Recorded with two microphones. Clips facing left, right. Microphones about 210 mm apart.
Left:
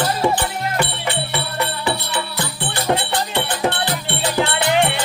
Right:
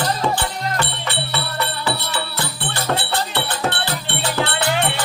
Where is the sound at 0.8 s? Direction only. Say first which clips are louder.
Left 3 dB; 15° left (ahead or behind).